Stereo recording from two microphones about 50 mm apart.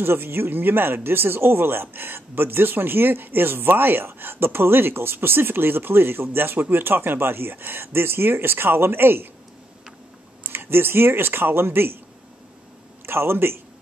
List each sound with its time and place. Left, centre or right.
0.0 s speech: right
10.5 s speech: right
13.0 s a man's voice: right